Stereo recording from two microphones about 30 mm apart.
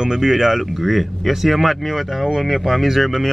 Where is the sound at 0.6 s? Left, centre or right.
Centre.